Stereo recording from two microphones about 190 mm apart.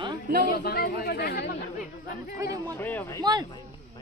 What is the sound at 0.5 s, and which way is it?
Speech, 50° left (ahead or behind).